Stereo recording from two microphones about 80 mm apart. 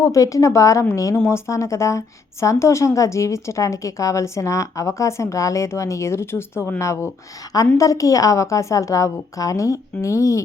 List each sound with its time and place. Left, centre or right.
0.0 s a woman's voice: left